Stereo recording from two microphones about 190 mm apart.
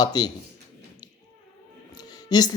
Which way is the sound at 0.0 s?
20° left (ahead or behind).